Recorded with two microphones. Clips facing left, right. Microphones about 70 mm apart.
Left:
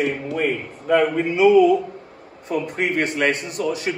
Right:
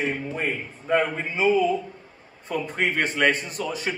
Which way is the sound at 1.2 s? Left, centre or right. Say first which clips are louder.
Left 7 dB; right.